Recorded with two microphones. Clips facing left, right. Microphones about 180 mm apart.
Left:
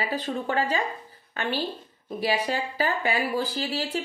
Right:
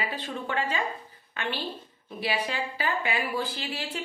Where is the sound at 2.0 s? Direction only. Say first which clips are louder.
Left 4 dB; 40° left (ahead or behind).